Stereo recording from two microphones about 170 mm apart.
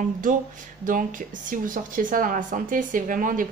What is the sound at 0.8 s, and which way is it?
Speech, 55° right (ahead or behind).